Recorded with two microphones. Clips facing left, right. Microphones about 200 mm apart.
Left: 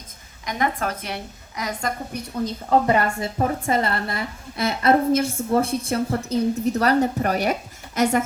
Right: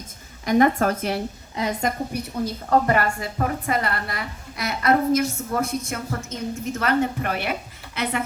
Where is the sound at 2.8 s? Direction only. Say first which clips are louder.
Left 1 dB; 20° left (ahead or behind).